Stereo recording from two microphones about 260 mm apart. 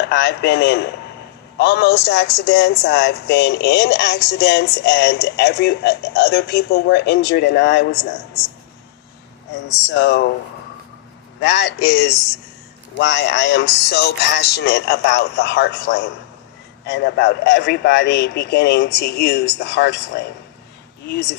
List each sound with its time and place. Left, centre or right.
0.0 s speech: left
9.9 s speech: left
11.3 s speech: left